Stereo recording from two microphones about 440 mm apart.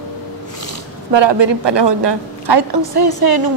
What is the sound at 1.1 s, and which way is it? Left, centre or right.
A woman's voice, right.